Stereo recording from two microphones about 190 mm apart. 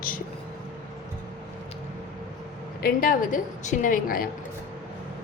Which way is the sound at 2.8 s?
45° left (ahead or behind).